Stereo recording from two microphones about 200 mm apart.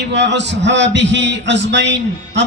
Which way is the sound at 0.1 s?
60° right (ahead or behind).